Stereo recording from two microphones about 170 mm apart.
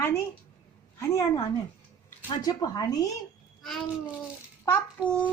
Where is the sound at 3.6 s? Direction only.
Centre (ahead or behind).